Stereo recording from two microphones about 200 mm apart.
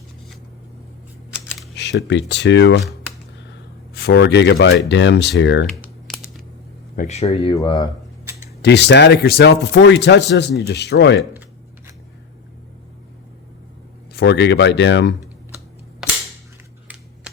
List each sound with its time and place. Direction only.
1.7 s speech: 60° left (ahead or behind)
4.1 s speech: 60° left (ahead or behind)
6.1 s scissors: centre (ahead or behind)
6.9 s speech: 40° left (ahead or behind)
7.5 s speech: 20° left (ahead or behind)
8.6 s speech: 60° left (ahead or behind)
14.1 s speech: 55° left (ahead or behind)